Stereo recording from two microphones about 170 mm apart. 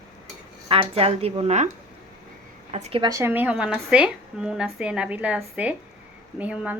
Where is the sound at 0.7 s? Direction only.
35° right (ahead or behind).